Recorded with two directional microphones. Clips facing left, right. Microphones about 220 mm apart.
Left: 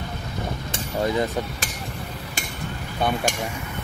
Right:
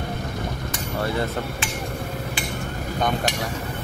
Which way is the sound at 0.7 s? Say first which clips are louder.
Left 3 dB; 15° left (ahead or behind).